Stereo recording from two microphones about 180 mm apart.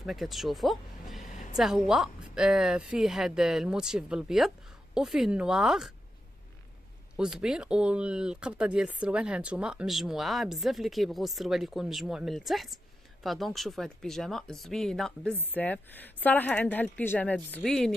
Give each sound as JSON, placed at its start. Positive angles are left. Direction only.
{"t": 0.0, "sound": "speech", "side_deg": 0}
{"t": 1.2, "sound": "a sound", "side_deg": 45}
{"t": 1.5, "sound": "speech", "side_deg": -5}
{"t": 7.2, "sound": "a woman's voice", "side_deg": -5}